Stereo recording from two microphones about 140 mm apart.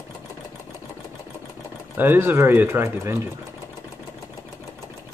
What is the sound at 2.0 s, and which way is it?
Speech, 15° right (ahead or behind).